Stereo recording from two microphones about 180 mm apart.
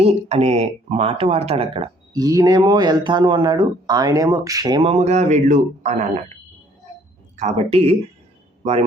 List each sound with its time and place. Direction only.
0.0 s speech: 35° right (ahead or behind)
2.1 s speech: 20° right (ahead or behind); by 6.1 s 40° right (ahead or behind)
7.3 s speech: 40° right (ahead or behind)